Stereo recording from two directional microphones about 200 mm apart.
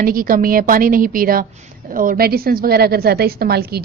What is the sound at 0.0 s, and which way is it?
A woman's voice, 45° right (ahead or behind).